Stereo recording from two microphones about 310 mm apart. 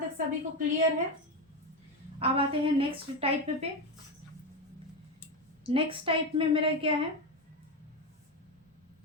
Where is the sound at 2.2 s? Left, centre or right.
Centre.